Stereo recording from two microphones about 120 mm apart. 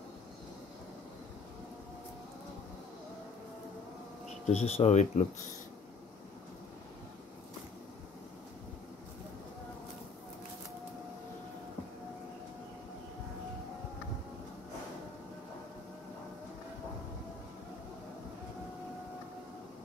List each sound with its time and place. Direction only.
4.5 s speech: 60° left (ahead or behind)